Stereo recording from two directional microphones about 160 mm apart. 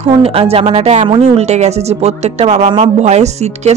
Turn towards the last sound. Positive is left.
turn(degrees=-45)  # may be behind; listen again after turning